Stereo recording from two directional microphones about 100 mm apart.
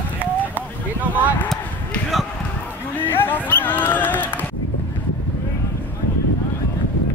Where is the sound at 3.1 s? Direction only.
20° left (ahead or behind).